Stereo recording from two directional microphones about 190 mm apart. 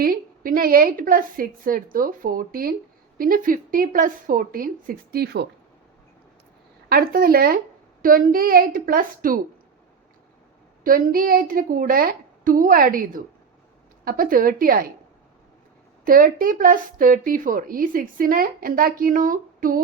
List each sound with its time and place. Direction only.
0.0 s speech: 50° right (ahead or behind)
6.8 s speech: 50° right (ahead or behind)
10.8 s speech: 50° right (ahead or behind)
16.0 s speech: 45° right (ahead or behind)